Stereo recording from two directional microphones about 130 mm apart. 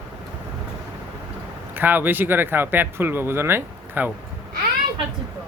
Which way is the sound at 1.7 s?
15° right (ahead or behind).